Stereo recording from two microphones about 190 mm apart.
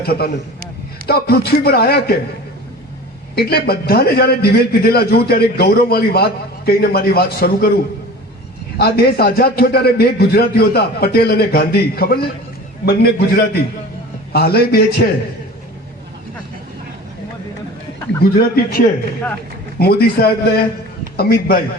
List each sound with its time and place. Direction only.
0.0 s a man's voice: 55° left (ahead or behind)
3.3 s a man's voice: 55° left (ahead or behind)
8.8 s a man's voice: 55° left (ahead or behind)
18.2 s a man's voice: 55° left (ahead or behind)
19.8 s a man's voice: 55° left (ahead or behind)